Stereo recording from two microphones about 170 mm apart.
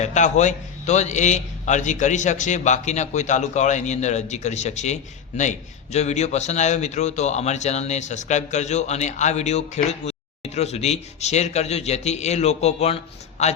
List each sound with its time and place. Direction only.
0.0 s a man's voice: 45° left (ahead or behind)